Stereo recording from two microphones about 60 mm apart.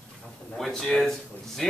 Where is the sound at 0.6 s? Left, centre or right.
Centre.